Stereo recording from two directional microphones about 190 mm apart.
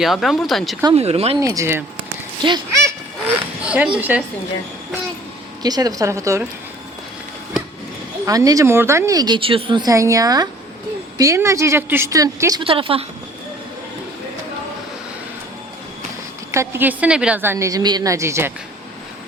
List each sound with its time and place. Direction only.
0.0 s speech: centre (ahead or behind)
0.9 s speech: 35° right (ahead or behind)
1.4 s a woman's voice: 15° right (ahead or behind)
2.0 s a sound: 25° right (ahead or behind)
3.6 s a woman's voice: 5° right (ahead or behind)
5.6 s a woman's voice: 20° right (ahead or behind)
8.2 s a woman's voice: 15° right (ahead or behind)
12.6 s a woman's voice: 30° right (ahead or behind)
16.5 s a woman's voice: 15° right (ahead or behind)